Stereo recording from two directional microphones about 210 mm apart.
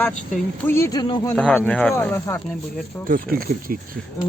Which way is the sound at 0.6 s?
10° left (ahead or behind).